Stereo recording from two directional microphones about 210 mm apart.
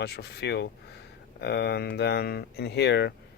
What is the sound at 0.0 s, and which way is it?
Speech, 50° left (ahead or behind).